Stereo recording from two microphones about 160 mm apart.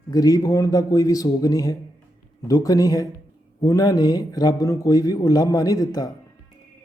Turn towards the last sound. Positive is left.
turn(degrees=25)  # may be behind; listen again after turning